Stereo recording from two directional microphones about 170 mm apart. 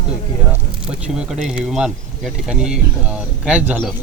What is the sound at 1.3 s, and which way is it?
Speech, 5° right (ahead or behind).